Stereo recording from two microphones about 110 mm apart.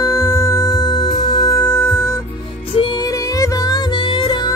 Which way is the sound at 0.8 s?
45° left (ahead or behind).